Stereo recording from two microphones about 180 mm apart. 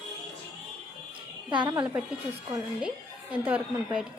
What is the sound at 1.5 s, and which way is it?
Speech, 25° right (ahead or behind).